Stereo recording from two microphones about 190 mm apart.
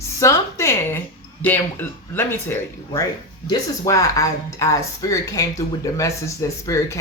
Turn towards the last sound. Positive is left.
turn(degrees=15)  # may be behind; listen again after turning